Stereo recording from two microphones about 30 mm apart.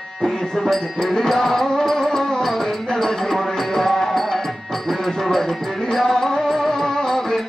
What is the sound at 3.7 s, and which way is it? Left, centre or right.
Music, centre.